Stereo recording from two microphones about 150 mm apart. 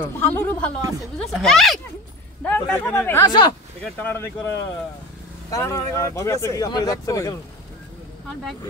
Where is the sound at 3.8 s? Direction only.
10° left (ahead or behind).